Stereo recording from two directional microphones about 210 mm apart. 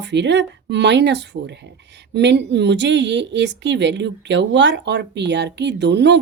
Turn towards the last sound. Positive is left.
turn(degrees=-55)  # may be behind; listen again after turning